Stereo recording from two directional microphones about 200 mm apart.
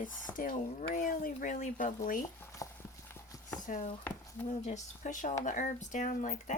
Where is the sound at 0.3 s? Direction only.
40° left (ahead or behind).